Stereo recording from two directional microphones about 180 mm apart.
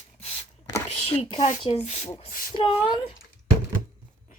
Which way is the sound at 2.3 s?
50° left (ahead or behind).